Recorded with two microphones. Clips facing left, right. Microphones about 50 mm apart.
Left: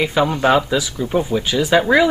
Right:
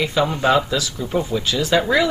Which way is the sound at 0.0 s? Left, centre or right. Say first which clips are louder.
Left 2 dB; left.